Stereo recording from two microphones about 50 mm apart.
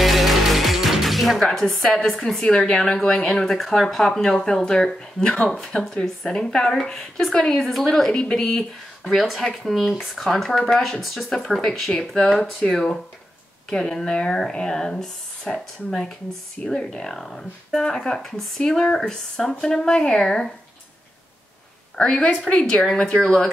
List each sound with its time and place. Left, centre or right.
0.0 s music: centre
1.5 s a woman's voice: centre
8.1 s a woman's voice: centre
9.1 s a woman's voice: centre
16.6 s a woman's voice: centre
21.9 s a woman's voice: centre